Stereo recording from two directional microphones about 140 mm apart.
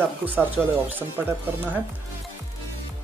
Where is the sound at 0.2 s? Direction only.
15° right (ahead or behind).